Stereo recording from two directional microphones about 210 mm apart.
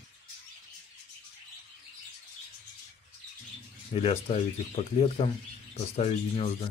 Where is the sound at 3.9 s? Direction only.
30° left (ahead or behind).